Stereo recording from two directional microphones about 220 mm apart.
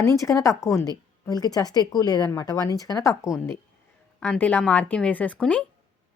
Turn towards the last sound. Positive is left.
turn(degrees=5)  # may be behind; listen again after turning